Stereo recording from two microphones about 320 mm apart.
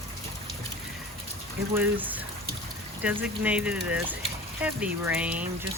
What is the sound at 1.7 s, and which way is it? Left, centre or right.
Speech, centre.